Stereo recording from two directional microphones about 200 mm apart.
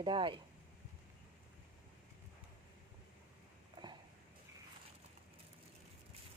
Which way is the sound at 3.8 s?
25° right (ahead or behind).